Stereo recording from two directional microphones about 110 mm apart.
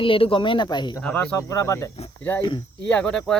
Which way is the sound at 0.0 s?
55° left (ahead or behind).